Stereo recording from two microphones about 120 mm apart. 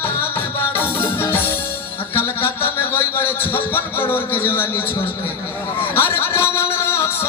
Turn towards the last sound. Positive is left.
turn(degrees=20)  # may be behind; listen again after turning